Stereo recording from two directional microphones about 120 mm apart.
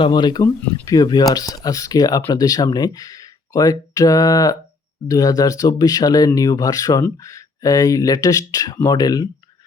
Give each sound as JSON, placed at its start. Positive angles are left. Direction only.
{"t": 0.0, "sound": "speech", "side_deg": 35}